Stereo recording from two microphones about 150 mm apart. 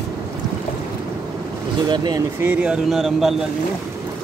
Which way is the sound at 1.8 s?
30° right (ahead or behind).